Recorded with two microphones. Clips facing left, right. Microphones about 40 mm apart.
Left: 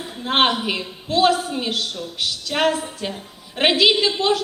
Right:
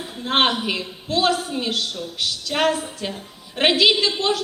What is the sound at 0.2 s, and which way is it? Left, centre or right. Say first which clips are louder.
A woman's voice: left 1 dB; centre.